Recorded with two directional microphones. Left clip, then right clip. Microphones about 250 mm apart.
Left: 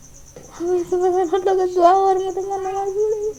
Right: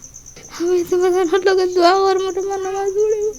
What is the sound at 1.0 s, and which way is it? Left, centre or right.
Speech, right.